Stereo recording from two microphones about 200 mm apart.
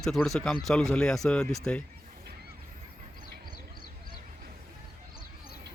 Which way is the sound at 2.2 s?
55° right (ahead or behind).